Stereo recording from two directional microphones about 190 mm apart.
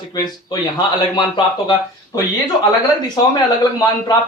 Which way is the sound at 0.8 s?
20° left (ahead or behind).